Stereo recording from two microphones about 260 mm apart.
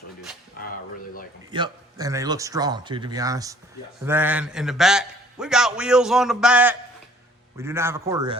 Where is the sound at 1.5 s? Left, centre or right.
Centre.